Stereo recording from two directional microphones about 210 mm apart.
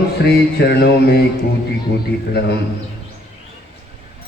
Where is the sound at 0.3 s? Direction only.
50° left (ahead or behind).